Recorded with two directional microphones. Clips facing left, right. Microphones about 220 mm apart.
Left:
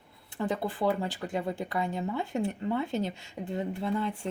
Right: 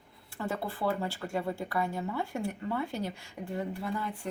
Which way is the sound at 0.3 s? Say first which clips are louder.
Left 4 dB; 20° left (ahead or behind).